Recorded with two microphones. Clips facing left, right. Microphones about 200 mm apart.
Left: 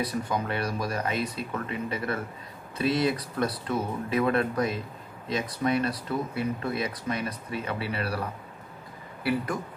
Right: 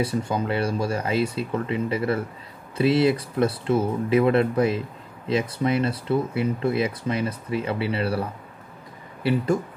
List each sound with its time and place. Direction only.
0.3 s speech: 30° right (ahead or behind)